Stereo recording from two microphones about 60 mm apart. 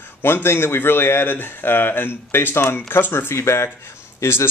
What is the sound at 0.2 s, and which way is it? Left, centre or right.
Speech, left.